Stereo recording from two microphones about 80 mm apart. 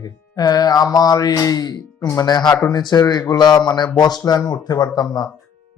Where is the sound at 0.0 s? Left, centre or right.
Left.